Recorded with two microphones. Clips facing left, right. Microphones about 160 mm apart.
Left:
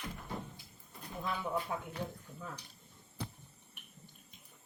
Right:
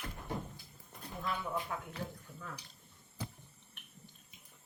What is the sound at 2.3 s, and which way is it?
Speech, 10° right (ahead or behind).